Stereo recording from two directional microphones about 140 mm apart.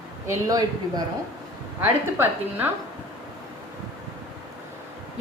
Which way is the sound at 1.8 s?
15° right (ahead or behind).